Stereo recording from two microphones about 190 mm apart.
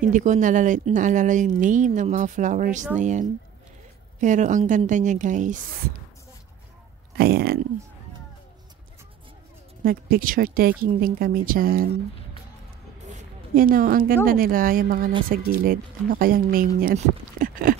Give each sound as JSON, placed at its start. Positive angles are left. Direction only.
{"t": 0.1, "sound": "a woman's voice", "side_deg": -40}
{"t": 7.2, "sound": "speech", "side_deg": -55}
{"t": 9.8, "sound": "speech", "side_deg": -50}
{"t": 13.1, "sound": "a sound", "side_deg": -50}
{"t": 14.2, "sound": "speech", "side_deg": -50}